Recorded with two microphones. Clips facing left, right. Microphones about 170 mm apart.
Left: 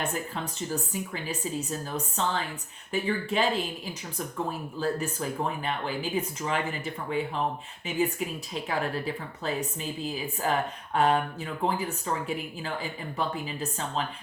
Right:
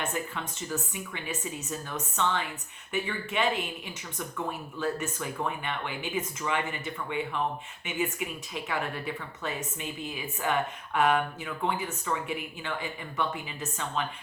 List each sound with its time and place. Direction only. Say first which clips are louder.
0.0 s speech: left 2 dB; 35° left (ahead or behind)